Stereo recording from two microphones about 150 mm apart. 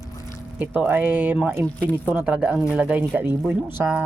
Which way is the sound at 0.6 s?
10° right (ahead or behind).